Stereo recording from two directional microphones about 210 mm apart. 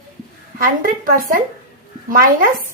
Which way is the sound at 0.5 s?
40° right (ahead or behind).